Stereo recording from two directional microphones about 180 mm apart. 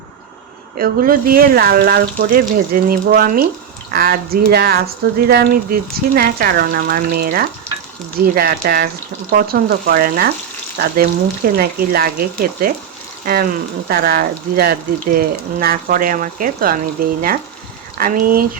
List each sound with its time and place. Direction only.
0.8 s speech: 55° right (ahead or behind)